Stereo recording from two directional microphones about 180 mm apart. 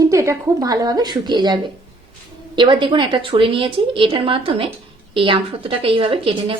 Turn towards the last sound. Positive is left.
turn(degrees=-30)  # may be behind; listen again after turning